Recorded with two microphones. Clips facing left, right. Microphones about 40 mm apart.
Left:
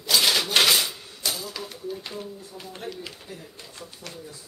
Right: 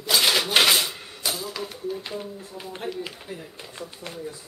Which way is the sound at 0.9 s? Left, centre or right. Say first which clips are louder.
Right 3 dB; right.